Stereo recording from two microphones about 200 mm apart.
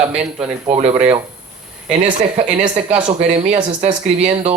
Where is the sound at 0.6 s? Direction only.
35° right (ahead or behind).